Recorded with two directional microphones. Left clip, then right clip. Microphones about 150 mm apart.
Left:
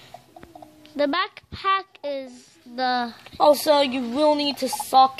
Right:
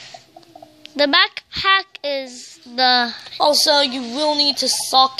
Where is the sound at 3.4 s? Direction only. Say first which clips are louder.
Right 2 dB; 30° left (ahead or behind).